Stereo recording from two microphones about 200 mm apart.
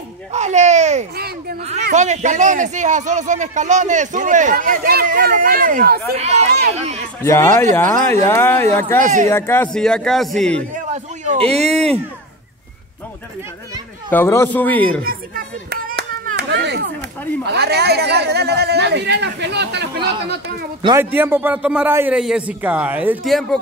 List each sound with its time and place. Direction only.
0.3 s a sound: 35° right (ahead or behind)
1.1 s a sound: 50° right (ahead or behind)
1.6 s speech: 35° right (ahead or behind)
6.1 s speech: 35° right (ahead or behind)
7.2 s speech: 10° left (ahead or behind)
8.8 s speech: 40° right (ahead or behind)
9.3 s a man's voice: 10° left (ahead or behind)
10.7 s a sound: 35° right (ahead or behind)
14.1 s speech: 10° left (ahead or behind)
15.0 s clapping: 45° right (ahead or behind)
17.5 s a woman's voice: 55° right (ahead or behind)
20.8 s a man's voice: 15° right (ahead or behind)